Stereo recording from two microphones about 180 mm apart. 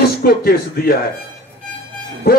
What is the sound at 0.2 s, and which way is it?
Speech, 60° left (ahead or behind).